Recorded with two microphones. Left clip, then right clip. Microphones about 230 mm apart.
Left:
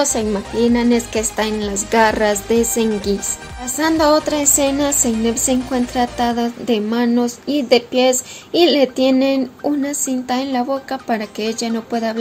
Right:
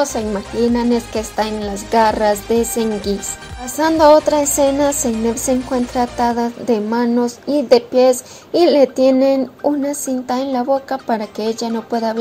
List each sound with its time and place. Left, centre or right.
0.0 s a woman's voice: centre